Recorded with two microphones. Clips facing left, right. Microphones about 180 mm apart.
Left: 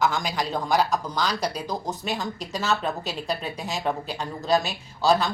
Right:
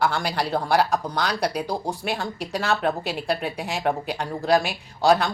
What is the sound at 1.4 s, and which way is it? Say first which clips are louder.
A woman's voice: right 3 dB; 10° right (ahead or behind).